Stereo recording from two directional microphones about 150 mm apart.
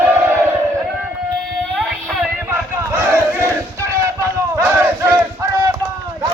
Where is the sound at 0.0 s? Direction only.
15° right (ahead or behind).